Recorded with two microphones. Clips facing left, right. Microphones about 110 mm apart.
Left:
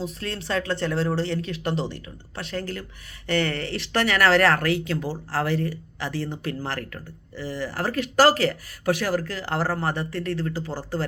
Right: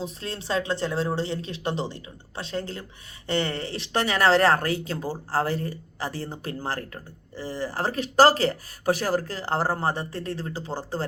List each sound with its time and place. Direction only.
0.0 s speech: 25° right (ahead or behind)